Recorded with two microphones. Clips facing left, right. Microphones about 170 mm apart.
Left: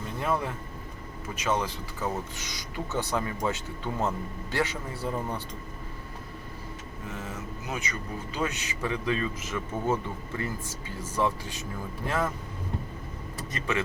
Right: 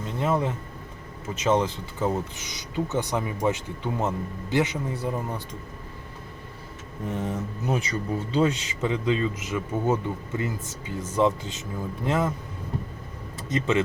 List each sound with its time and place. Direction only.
0.2 s a man's voice: 20° right (ahead or behind)
7.1 s a man's voice: 30° right (ahead or behind)
13.3 s speech: 20° right (ahead or behind)